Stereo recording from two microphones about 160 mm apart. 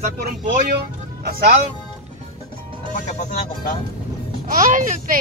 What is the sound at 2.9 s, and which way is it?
Speech, 50° left (ahead or behind).